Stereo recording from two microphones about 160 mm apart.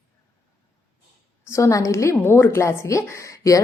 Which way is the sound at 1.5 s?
20° left (ahead or behind).